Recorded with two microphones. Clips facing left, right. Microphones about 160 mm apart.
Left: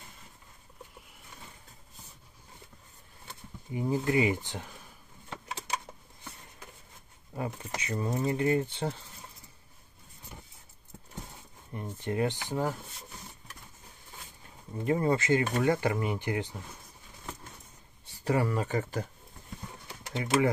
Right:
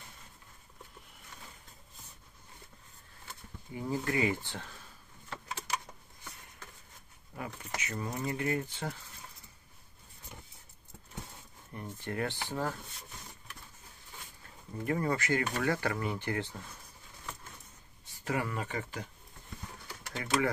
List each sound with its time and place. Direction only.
3.7 s speech: 20° left (ahead or behind)
7.3 s speech: 30° left (ahead or behind)
11.7 s speech: 20° left (ahead or behind)
14.8 s speech: 20° left (ahead or behind)
18.0 s speech: 35° left (ahead or behind)
19.9 s speech: 20° left (ahead or behind)